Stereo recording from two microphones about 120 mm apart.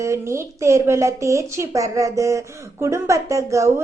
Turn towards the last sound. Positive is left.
turn(degrees=-25)  # may be behind; listen again after turning